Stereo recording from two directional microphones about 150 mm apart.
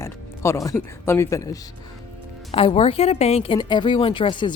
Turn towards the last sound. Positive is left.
turn(degrees=30)  # may be behind; listen again after turning